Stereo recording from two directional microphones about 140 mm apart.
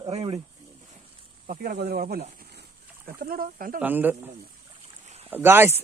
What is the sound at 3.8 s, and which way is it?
Speech, 15° right (ahead or behind).